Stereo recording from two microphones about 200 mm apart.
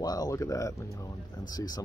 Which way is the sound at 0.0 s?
20° left (ahead or behind).